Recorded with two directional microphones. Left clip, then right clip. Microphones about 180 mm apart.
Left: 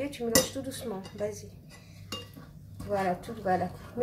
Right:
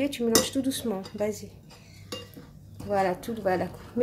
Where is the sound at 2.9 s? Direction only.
45° right (ahead or behind).